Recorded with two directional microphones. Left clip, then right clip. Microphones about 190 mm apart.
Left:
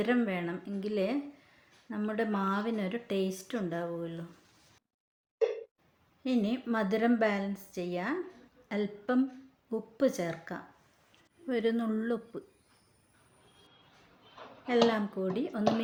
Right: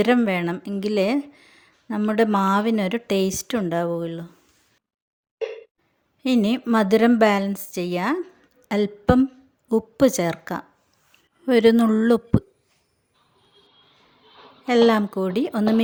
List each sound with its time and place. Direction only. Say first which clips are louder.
0.0 s speech: right 11 dB; 60° right (ahead or behind)
6.2 s a woman's voice: right 10 dB; 65° right (ahead or behind)
14.7 s speech: right 10 dB; 60° right (ahead or behind)